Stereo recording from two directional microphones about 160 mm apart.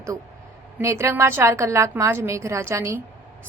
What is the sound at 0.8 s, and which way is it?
A woman's voice, 15° right (ahead or behind).